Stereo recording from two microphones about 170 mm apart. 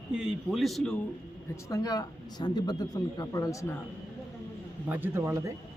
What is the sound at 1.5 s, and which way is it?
Speech, 20° left (ahead or behind).